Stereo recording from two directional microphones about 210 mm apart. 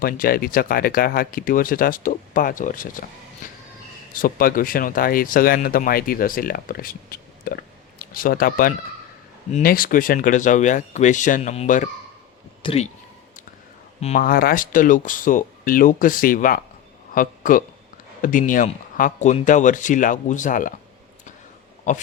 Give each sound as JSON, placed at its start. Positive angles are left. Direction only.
{"t": 0.0, "sound": "speech", "side_deg": 45}
{"t": 3.4, "sound": "music", "side_deg": 40}
{"t": 4.1, "sound": "speech", "side_deg": 45}
{"t": 14.0, "sound": "speech", "side_deg": 35}